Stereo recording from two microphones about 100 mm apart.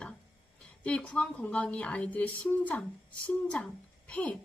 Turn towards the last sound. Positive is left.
turn(degrees=10)  # may be behind; listen again after turning